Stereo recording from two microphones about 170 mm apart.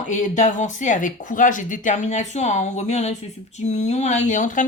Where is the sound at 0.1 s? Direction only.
45° left (ahead or behind).